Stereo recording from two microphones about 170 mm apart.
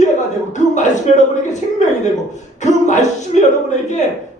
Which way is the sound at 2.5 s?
45° left (ahead or behind).